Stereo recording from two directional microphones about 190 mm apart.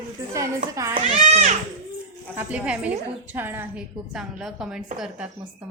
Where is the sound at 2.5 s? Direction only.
5° right (ahead or behind).